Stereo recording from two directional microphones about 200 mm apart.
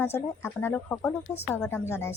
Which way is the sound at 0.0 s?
10° left (ahead or behind).